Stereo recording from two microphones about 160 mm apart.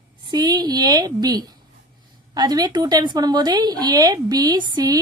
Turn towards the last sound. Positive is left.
turn(degrees=-25)  # may be behind; listen again after turning